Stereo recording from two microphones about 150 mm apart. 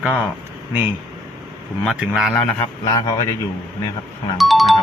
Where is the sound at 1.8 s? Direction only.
Centre (ahead or behind).